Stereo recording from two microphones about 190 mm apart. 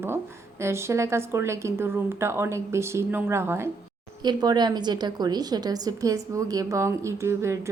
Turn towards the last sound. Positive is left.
turn(degrees=-15)  # may be behind; listen again after turning